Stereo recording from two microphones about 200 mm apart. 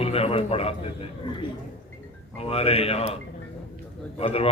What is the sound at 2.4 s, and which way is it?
Speech, 30° left (ahead or behind).